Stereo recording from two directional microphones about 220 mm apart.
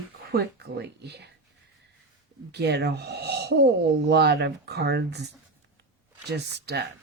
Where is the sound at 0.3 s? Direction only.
50° right (ahead or behind).